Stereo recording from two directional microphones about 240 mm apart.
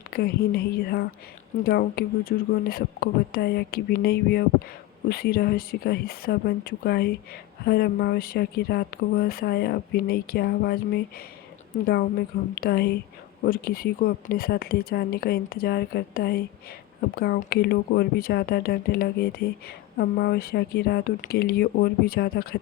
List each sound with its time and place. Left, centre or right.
0.1 s speech: left
12.5 s speech: left